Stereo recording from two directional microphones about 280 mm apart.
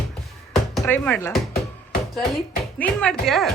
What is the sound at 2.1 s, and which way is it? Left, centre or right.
Music, centre.